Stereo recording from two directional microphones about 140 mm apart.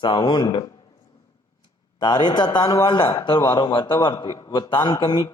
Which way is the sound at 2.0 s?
30° left (ahead or behind).